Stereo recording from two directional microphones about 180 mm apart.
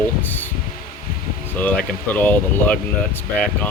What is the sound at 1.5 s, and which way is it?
Speech, 10° left (ahead or behind).